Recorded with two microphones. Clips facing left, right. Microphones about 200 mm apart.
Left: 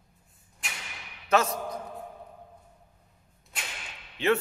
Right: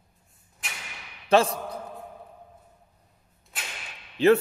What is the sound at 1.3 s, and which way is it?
Speech, 30° right (ahead or behind).